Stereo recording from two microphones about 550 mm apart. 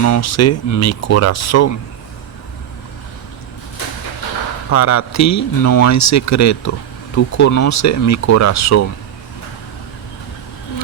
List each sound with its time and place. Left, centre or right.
0.0 s speech: left
4.7 s speech: left